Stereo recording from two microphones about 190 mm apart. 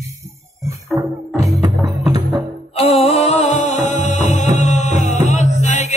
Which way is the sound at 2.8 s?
30° left (ahead or behind).